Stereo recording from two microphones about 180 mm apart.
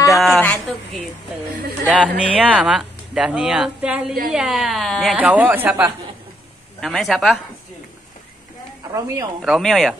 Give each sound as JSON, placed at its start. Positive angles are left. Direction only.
{"t": 0.4, "sound": "a sound", "side_deg": 5}
{"t": 1.9, "sound": "speech", "side_deg": -5}
{"t": 6.8, "sound": "speech", "side_deg": 0}
{"t": 8.9, "sound": "speech", "side_deg": -20}
{"t": 9.4, "sound": "speech", "side_deg": 0}